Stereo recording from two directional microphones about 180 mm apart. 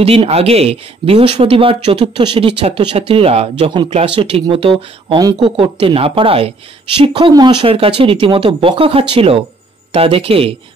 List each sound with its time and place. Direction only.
0.0 s speech: 35° right (ahead or behind)